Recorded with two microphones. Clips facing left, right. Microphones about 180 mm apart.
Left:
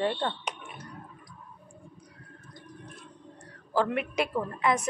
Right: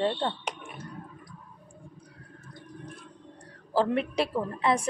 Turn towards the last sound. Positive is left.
turn(degrees=-30)  # may be behind; listen again after turning